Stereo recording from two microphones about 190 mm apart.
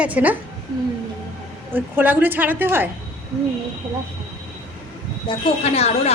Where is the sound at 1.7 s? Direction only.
10° right (ahead or behind).